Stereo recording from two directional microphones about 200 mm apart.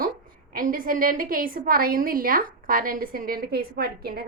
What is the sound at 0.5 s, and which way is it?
A woman's voice, 45° right (ahead or behind).